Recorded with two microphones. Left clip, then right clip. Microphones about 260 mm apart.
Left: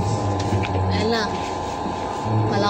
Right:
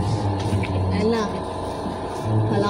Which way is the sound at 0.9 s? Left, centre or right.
Right.